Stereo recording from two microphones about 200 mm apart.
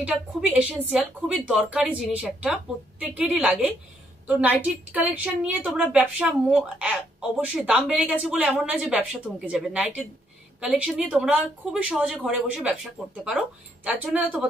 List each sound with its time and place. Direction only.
0.0 s a woman's voice: 5° right (ahead or behind)